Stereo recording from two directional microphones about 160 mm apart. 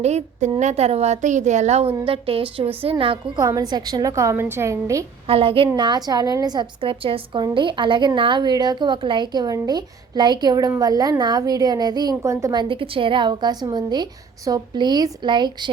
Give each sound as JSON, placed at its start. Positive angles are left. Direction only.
{"t": 0.0, "sound": "a woman's voice", "side_deg": -45}
{"t": 5.3, "sound": "a woman's voice", "side_deg": -35}